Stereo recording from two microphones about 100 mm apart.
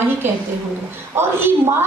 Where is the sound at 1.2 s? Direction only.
25° right (ahead or behind).